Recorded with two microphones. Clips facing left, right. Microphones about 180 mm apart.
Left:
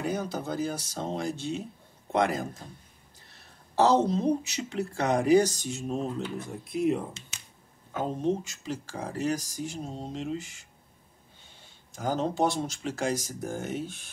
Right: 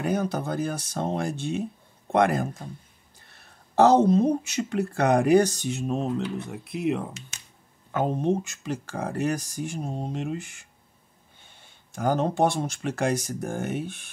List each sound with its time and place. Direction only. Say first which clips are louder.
0.0 s speech: right 5 dB; 60° right (ahead or behind)
11.9 s speech: right 4 dB; 60° right (ahead or behind)